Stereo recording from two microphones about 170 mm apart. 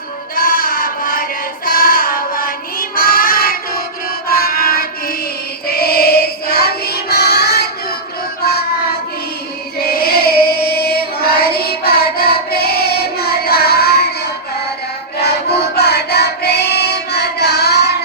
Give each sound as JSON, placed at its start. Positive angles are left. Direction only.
{"t": 0.3, "sound": "a sound", "side_deg": 60}
{"t": 4.3, "sound": "music", "side_deg": 60}
{"t": 5.6, "sound": "child singing", "side_deg": 65}
{"t": 9.8, "sound": "carnatic music", "side_deg": 65}
{"t": 10.7, "sound": "music", "side_deg": 65}
{"t": 11.8, "sound": "child singing", "side_deg": 65}
{"t": 15.2, "sound": "child singing", "side_deg": 70}